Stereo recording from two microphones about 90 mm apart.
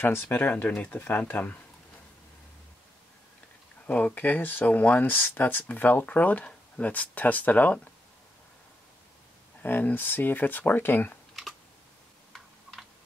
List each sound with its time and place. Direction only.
0.0 s speech: 25° left (ahead or behind)
3.8 s speech: 15° left (ahead or behind)
9.6 s speech: 20° left (ahead or behind)